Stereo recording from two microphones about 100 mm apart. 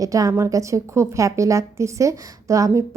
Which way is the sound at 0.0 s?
35° right (ahead or behind).